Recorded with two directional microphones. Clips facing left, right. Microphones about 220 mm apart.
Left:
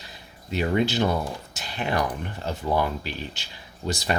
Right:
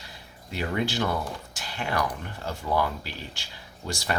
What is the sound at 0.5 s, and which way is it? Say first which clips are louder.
Speech: left 5 dB; 20° left (ahead or behind).